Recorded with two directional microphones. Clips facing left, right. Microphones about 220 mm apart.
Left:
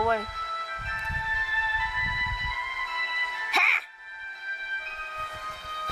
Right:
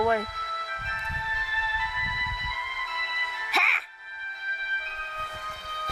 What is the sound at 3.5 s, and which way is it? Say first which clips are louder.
Music: right 1 dB; centre (ahead or behind).